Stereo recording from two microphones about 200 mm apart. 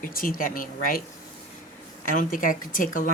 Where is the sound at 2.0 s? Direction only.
40° left (ahead or behind).